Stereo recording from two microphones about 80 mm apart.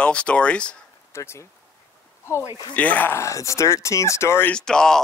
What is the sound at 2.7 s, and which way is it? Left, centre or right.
Speech, left.